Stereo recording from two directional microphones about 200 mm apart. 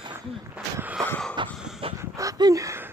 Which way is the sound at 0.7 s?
10° right (ahead or behind).